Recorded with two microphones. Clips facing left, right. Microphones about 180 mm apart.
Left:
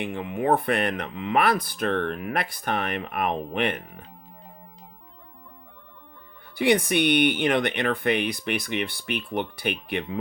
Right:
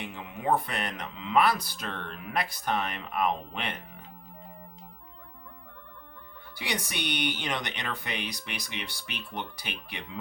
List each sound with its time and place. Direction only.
0.0 s speech: 55° left (ahead or behind)
6.6 s speech: 55° left (ahead or behind)